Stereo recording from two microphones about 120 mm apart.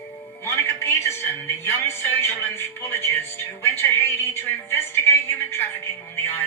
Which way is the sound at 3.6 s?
20° left (ahead or behind).